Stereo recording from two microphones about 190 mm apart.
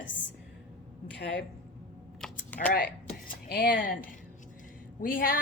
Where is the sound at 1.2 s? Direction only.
65° left (ahead or behind).